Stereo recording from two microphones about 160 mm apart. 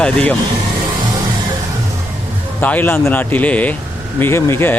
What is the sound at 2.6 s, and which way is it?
Speech, 10° left (ahead or behind).